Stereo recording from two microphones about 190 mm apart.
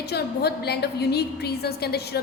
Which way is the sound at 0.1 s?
60° left (ahead or behind).